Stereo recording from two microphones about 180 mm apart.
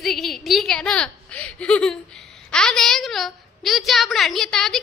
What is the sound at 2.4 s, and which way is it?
A woman's voice, 5° left (ahead or behind).